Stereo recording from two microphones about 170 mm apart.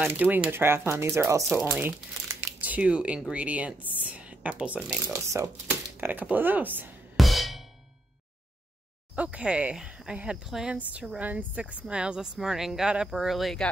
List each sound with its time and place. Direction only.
0.0 s speech: 10° right (ahead or behind)
5.0 s speech: 20° right (ahead or behind)
7.2 s music: centre (ahead or behind)
9.1 s speech: 5° right (ahead or behind)